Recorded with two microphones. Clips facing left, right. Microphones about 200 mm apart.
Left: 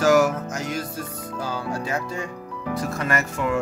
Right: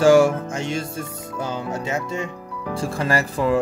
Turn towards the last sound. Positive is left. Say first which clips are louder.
# right 4 dB
turn(degrees=-35)  # may be behind; listen again after turning